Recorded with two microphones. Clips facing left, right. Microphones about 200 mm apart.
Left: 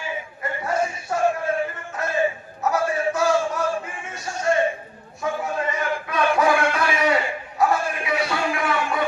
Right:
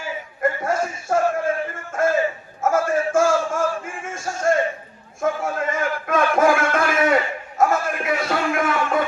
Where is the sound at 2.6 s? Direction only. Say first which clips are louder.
Right 2 dB; 50° right (ahead or behind).